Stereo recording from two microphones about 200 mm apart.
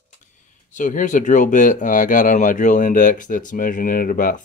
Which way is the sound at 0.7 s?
40° left (ahead or behind).